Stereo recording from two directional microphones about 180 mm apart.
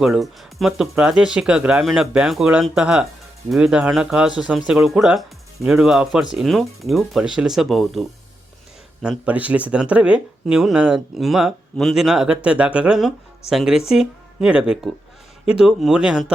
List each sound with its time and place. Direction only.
0.0 s speech: centre (ahead or behind)